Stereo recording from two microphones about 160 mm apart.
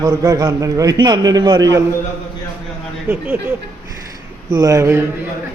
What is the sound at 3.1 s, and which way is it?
Speech, 15° right (ahead or behind).